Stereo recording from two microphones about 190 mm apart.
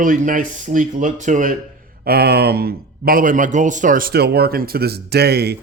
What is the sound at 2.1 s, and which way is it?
A man's voice, 55° right (ahead or behind).